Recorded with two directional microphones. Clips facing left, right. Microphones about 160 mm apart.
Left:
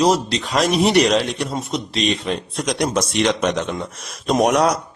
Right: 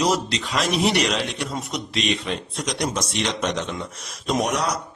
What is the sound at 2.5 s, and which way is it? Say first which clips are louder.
A man's voice: left 6 dB; 55° left (ahead or behind).